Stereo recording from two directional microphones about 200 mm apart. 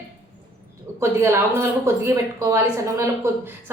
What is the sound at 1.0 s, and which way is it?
A woman's voice, 10° right (ahead or behind).